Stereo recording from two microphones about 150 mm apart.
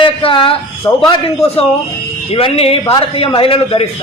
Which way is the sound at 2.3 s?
40° left (ahead or behind).